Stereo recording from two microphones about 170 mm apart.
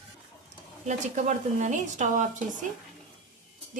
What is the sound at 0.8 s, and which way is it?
A woman's voice, 45° right (ahead or behind).